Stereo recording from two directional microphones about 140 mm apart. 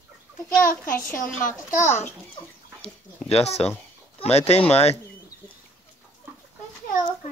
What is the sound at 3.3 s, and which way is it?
Speech, 45° left (ahead or behind).